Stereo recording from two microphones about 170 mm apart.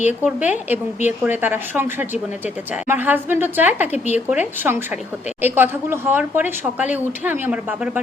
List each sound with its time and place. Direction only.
0.2 s a woman's voice: 10° right (ahead or behind)
3.9 s speech: 40° left (ahead or behind)
4.3 s a woman's voice: 10° right (ahead or behind)